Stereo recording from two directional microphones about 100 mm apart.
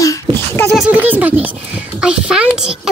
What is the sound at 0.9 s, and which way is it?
A child's voice, 15° right (ahead or behind).